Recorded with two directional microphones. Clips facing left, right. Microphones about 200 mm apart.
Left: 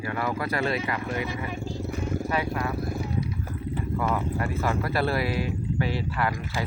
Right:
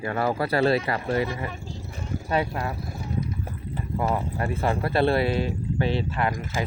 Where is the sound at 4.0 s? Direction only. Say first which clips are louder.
Right 2 dB; 30° right (ahead or behind).